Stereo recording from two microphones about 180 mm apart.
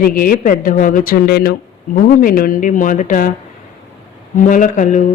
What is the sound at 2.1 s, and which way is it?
Speech, 50° left (ahead or behind).